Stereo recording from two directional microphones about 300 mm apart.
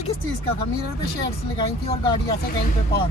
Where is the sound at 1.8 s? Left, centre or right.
Centre.